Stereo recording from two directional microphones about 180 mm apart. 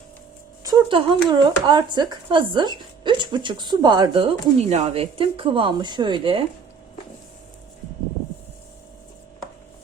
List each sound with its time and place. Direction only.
0.6 s speech: 25° right (ahead or behind)